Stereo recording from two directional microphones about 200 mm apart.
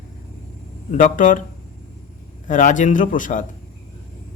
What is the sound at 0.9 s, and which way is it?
Speech, 40° left (ahead or behind).